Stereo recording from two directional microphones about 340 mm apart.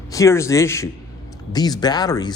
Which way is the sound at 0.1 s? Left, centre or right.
Centre.